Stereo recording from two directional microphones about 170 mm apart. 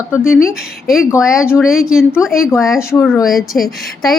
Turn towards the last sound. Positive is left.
turn(degrees=0)  # may be behind; listen again after turning